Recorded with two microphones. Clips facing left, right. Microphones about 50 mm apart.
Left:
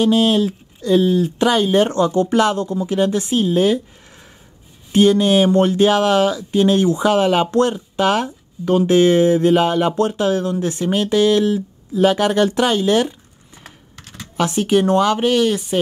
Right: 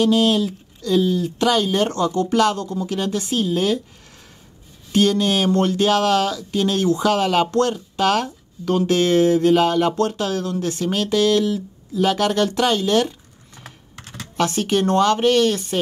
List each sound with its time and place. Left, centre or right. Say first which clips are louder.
0.0 s speech: left 2 dB; left
4.9 s speech: left 5 dB; left
13.6 s typing: right 1 dB; centre
14.3 s speech: left 3 dB; centre